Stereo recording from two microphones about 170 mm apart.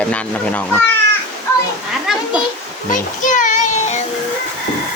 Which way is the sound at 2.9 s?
50° left (ahead or behind).